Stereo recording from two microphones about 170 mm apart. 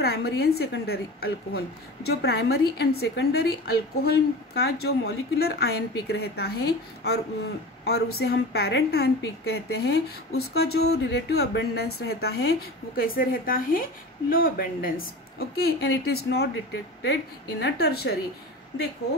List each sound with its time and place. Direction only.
0.0 s a woman's voice: 65° left (ahead or behind)
17.0 s a woman's voice: 80° left